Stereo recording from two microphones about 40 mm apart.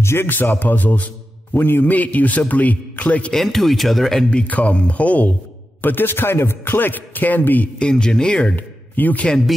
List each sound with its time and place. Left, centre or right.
0.0 s speech: left
1.6 s a man's voice: left
2.0 s a man's voice: left
3.4 s speech: centre
4.5 s a man's voice: left
5.8 s a man's voice: left
7.8 s speech: centre
8.5 s speech: left